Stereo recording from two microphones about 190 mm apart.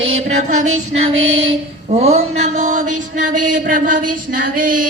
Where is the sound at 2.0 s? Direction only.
35° right (ahead or behind).